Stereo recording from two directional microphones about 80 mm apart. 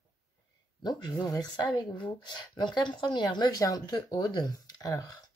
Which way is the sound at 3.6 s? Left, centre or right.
Left.